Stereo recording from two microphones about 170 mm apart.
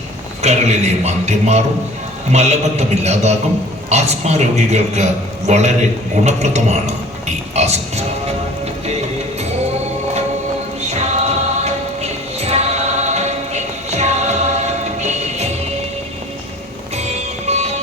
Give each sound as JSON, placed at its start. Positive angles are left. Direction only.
{"t": 0.4, "sound": "a man's voice", "side_deg": -40}
{"t": 10.8, "sound": "music", "side_deg": -40}
{"t": 16.9, "sound": "music", "side_deg": -40}